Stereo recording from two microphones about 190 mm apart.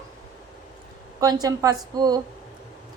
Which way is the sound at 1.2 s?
20° right (ahead or behind).